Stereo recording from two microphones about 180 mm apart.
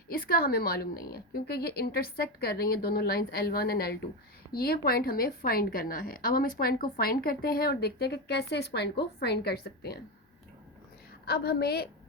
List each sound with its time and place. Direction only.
0.1 s a woman's voice: 55° left (ahead or behind)
11.3 s a woman's voice: 60° left (ahead or behind)